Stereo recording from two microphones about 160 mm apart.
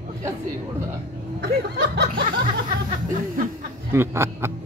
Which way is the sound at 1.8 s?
90° right.